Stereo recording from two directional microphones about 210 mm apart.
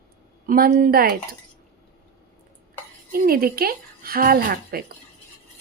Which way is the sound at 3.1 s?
45° right (ahead or behind).